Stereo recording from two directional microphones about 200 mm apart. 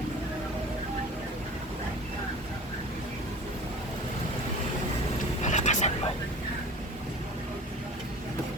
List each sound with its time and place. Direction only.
5.4 s vehicle: 35° left (ahead or behind)